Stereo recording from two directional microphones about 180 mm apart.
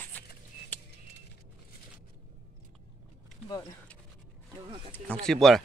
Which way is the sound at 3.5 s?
20° left (ahead or behind).